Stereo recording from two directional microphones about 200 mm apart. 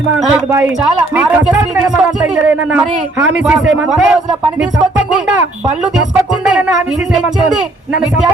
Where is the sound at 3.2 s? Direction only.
5° right (ahead or behind).